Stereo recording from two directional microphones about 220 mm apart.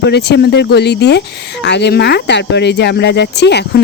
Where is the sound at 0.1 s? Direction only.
50° left (ahead or behind).